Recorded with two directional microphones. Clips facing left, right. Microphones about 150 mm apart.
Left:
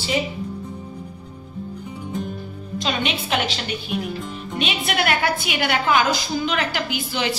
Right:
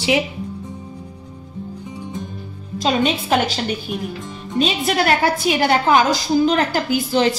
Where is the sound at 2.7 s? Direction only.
40° right (ahead or behind).